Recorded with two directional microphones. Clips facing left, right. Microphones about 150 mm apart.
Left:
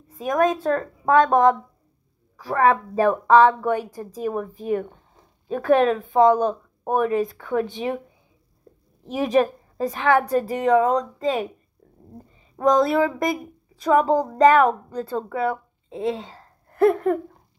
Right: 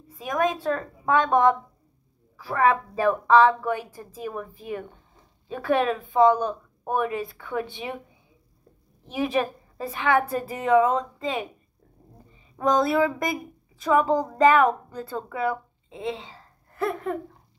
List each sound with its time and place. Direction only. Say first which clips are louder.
0.1 s a woman's voice: left 5 dB; 45° left (ahead or behind)
9.0 s a woman's voice: left 5 dB; 40° left (ahead or behind)
12.5 s a woman's voice: left 3 dB; 35° left (ahead or behind); by 17.2 s 55° left (ahead or behind)